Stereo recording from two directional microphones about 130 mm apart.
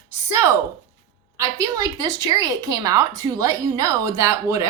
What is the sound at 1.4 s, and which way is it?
A woman's voice, 25° right (ahead or behind).